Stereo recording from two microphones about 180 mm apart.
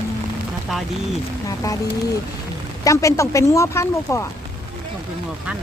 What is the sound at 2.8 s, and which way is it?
Speech, 15° left (ahead or behind).